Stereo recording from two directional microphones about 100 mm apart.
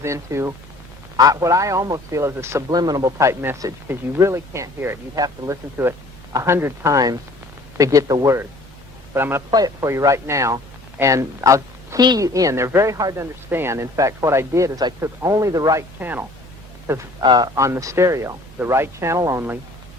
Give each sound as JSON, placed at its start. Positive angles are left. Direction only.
{"t": 0.0, "sound": "speech", "side_deg": -30}
{"t": 2.6, "sound": "speech", "side_deg": -40}
{"t": 5.1, "sound": "speech", "side_deg": -40}
{"t": 5.8, "sound": "speech", "side_deg": -20}
{"t": 9.1, "sound": "speech", "side_deg": -20}
{"t": 9.5, "sound": "speech", "side_deg": -40}
{"t": 13.1, "sound": "speech", "side_deg": -25}
{"t": 16.0, "sound": "speech", "side_deg": -20}
{"t": 17.2, "sound": "speech", "side_deg": -45}
{"t": 17.6, "sound": "speech", "side_deg": -30}